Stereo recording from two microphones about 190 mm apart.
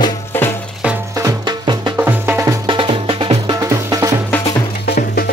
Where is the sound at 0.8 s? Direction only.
5° right (ahead or behind).